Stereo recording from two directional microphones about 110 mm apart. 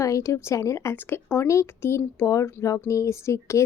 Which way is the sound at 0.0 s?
30° left (ahead or behind).